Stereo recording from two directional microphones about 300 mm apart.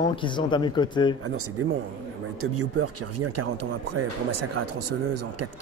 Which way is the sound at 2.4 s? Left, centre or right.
Right.